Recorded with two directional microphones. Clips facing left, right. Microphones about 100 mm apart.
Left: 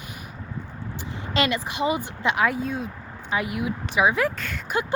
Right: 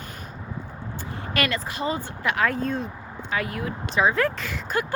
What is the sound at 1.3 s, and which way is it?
Speech, 20° left (ahead or behind).